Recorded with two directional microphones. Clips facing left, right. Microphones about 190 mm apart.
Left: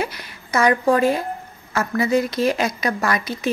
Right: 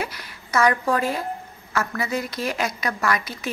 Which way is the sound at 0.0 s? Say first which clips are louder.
Left 4 dB; 20° left (ahead or behind).